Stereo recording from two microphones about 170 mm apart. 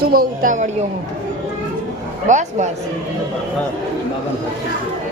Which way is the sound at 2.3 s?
45° right (ahead or behind).